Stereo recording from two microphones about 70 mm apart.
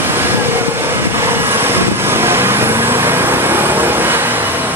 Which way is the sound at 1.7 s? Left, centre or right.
Right.